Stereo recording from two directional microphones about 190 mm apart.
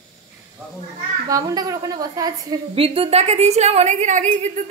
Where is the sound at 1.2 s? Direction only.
20° right (ahead or behind).